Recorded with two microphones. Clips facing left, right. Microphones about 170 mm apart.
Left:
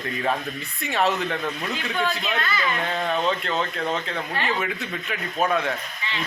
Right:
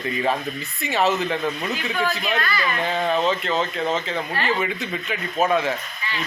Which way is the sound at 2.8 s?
Centre (ahead or behind).